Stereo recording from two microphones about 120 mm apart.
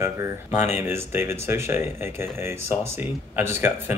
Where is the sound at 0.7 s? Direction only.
20° right (ahead or behind).